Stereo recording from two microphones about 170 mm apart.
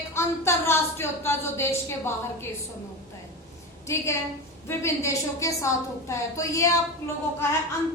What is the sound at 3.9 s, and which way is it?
A woman's voice, 15° left (ahead or behind).